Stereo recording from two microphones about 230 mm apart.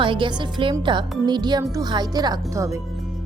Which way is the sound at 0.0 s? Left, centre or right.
Right.